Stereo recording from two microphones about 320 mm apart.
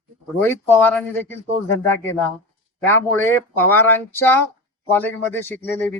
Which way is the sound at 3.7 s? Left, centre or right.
Centre.